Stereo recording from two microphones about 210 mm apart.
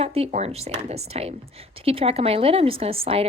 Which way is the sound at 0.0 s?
30° right (ahead or behind).